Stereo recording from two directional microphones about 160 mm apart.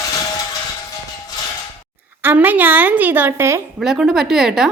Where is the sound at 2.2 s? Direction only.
10° right (ahead or behind).